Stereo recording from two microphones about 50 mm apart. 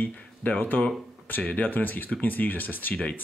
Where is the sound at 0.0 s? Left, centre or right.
Left.